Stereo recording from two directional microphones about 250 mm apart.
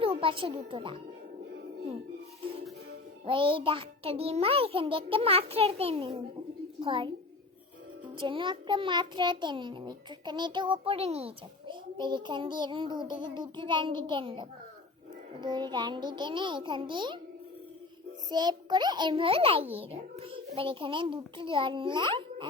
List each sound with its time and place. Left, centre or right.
0.0 s a woman's voice: right
3.2 s a child's voice: right
18.3 s a child's voice: centre